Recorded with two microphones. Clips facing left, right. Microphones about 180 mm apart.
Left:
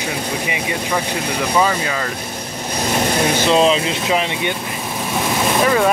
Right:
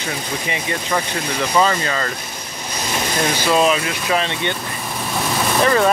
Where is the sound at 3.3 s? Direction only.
20° left (ahead or behind).